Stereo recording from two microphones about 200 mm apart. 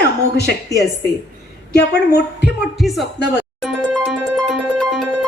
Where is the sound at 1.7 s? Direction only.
55° left (ahead or behind).